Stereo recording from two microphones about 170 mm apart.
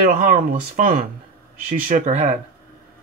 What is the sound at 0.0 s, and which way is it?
Speech, 55° right (ahead or behind).